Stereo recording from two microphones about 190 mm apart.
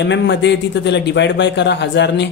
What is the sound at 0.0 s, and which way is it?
A man's voice, 65° left (ahead or behind).